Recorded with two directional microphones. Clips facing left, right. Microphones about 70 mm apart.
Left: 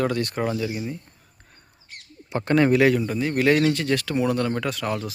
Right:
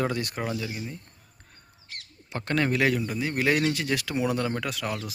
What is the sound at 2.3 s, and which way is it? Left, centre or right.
A man's voice, centre.